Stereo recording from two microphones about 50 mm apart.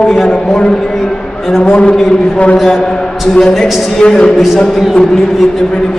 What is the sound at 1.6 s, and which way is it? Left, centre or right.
Speech, left.